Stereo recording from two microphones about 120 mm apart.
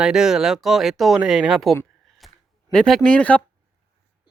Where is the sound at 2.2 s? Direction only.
Centre (ahead or behind).